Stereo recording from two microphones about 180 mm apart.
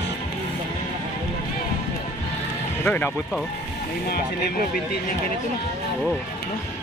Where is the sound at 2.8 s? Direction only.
10° left (ahead or behind).